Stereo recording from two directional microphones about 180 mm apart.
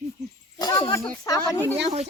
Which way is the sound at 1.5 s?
10° left (ahead or behind).